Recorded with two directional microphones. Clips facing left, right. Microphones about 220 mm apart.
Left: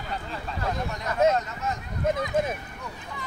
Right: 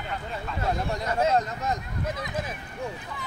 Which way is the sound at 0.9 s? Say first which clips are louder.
Left 3 dB; 30° right (ahead or behind).